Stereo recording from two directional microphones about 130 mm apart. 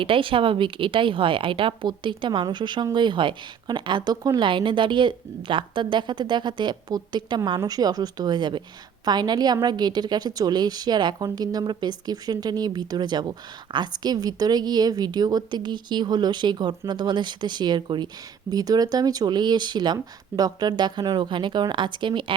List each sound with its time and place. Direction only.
0.0 s a woman's voice: 40° right (ahead or behind)